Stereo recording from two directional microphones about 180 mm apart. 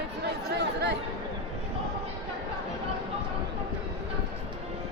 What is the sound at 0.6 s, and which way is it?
Chatter, 70° right (ahead or behind).